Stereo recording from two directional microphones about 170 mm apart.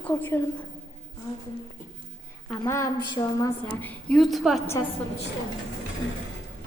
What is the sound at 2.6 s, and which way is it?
A woman's voice, 15° left (ahead or behind).